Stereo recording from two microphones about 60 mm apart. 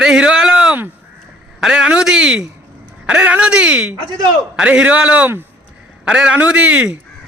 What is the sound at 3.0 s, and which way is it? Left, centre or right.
A man's voice, right.